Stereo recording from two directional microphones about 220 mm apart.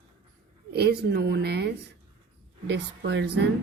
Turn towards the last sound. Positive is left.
turn(degrees=-50)  # may be behind; listen again after turning